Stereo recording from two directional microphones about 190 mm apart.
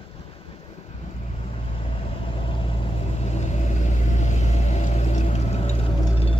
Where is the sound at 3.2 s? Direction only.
35° left (ahead or behind).